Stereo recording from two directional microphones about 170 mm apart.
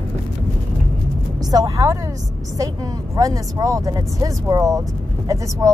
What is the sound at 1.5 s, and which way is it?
Speech, 20° right (ahead or behind).